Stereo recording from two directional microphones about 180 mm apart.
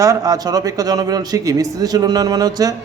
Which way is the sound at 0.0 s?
20° right (ahead or behind).